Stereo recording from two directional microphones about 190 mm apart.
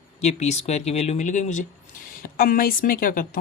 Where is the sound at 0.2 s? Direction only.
35° left (ahead or behind).